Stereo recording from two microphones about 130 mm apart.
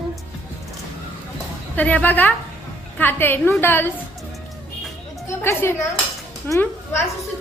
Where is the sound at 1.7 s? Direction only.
10° left (ahead or behind).